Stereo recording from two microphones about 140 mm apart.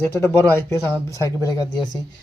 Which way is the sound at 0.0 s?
15° left (ahead or behind).